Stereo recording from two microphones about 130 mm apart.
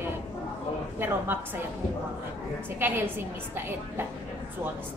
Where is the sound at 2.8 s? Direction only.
15° right (ahead or behind).